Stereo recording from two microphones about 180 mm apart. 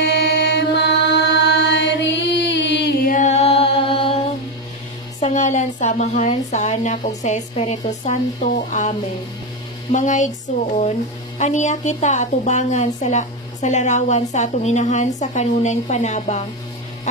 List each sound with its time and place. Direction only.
0.0 s chant: 70° left (ahead or behind)
3.1 s chant: 40° left (ahead or behind)
5.2 s a woman's voice: 40° left (ahead or behind)
9.9 s speech: 45° left (ahead or behind)
11.3 s a woman's voice: 40° left (ahead or behind)